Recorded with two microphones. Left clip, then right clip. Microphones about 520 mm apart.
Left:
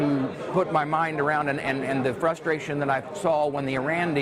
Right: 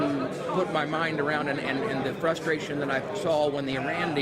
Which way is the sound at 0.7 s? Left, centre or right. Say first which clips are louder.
Left 3 dB; left.